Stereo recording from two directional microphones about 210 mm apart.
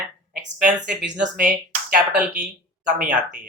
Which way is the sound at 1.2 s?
40° right (ahead or behind).